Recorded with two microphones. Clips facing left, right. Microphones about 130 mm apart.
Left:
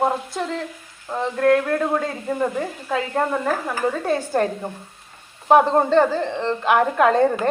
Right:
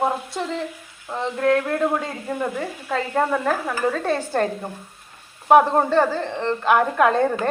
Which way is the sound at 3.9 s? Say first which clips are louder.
Left 1 dB; 10° left (ahead or behind).